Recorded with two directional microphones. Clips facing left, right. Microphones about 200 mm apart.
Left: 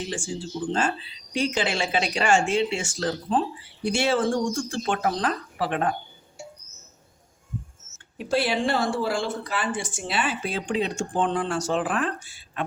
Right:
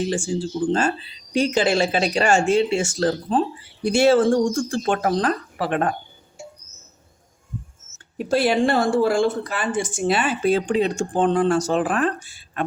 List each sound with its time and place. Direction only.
0.1 s speech: 40° right (ahead or behind)
7.9 s speech: 45° right (ahead or behind)